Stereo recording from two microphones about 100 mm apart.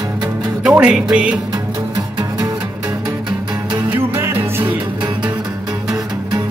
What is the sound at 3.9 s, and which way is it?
Music, 25° right (ahead or behind).